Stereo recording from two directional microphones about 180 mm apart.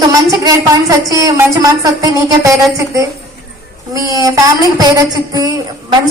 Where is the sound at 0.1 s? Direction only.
15° right (ahead or behind).